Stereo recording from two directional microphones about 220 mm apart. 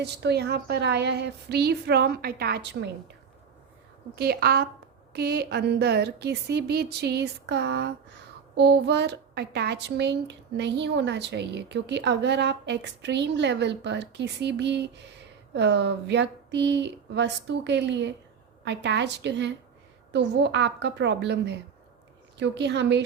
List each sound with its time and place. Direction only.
0.0 s speech: 50° right (ahead or behind)
4.1 s speech: 45° right (ahead or behind)